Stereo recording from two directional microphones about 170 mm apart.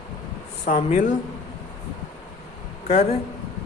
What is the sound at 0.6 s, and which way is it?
Speech, 45° left (ahead or behind).